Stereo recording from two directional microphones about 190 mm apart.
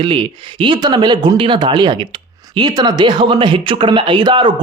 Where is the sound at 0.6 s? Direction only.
25° right (ahead or behind).